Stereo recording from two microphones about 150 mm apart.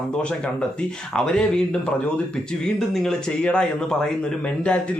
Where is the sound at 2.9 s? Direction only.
5° left (ahead or behind).